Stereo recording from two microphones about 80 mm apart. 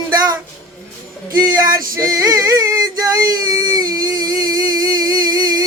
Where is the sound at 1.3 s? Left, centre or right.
Right.